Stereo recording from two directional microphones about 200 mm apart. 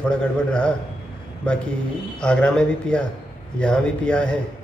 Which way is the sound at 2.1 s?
5° left (ahead or behind).